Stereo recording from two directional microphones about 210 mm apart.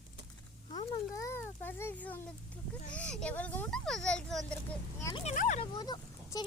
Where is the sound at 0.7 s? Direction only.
15° left (ahead or behind).